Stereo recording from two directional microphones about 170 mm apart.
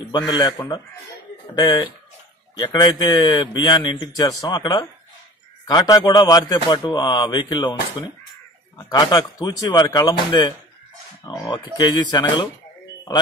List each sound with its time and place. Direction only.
0.3 s a man's voice: 25° left (ahead or behind)
8.7 s a man's voice: 20° left (ahead or behind)